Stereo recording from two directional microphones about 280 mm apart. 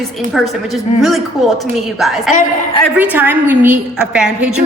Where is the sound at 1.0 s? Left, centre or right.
Centre.